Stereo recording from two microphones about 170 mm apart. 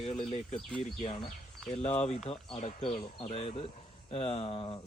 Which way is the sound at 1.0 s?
25° left (ahead or behind).